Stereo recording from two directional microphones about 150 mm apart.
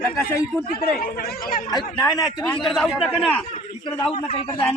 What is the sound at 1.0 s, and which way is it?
Speech, 80° left.